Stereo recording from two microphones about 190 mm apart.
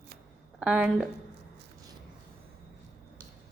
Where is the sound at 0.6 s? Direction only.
5° right (ahead or behind).